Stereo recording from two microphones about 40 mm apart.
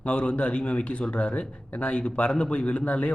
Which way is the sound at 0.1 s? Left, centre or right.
Left.